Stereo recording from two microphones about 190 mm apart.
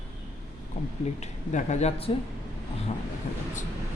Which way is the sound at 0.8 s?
40° left (ahead or behind).